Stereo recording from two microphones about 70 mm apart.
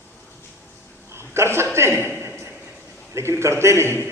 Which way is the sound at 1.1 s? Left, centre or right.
Right.